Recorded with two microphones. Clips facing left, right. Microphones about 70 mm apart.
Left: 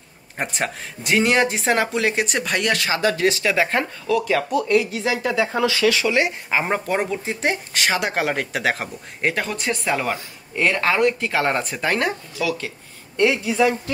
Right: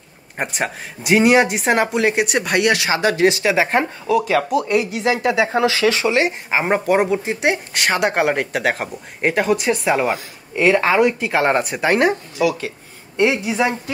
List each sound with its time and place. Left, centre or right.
0.4 s speech: centre
3.0 s speech: right